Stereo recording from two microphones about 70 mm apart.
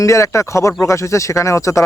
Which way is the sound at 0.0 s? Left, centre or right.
Left.